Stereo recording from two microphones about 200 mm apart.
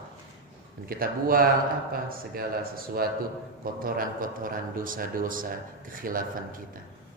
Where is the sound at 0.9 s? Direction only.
45° right (ahead or behind).